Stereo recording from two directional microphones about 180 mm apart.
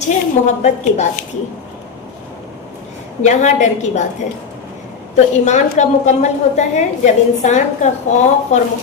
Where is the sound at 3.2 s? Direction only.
40° left (ahead or behind).